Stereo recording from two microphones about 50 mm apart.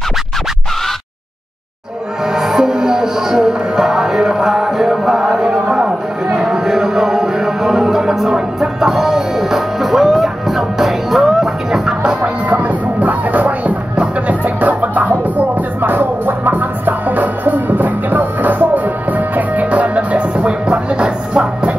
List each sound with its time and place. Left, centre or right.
2.3 s music: centre
5.5 s a sound: centre
6.4 s music: centre
12.2 s music: right
15.3 s music: right; by 21.7 s centre